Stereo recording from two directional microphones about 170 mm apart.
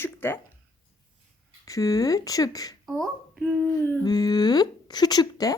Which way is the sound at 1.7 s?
20° left (ahead or behind).